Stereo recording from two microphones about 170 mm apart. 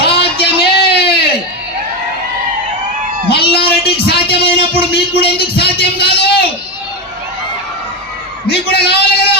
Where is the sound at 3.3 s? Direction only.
70° left (ahead or behind).